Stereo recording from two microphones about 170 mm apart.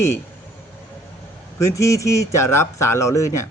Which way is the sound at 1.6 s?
15° left (ahead or behind).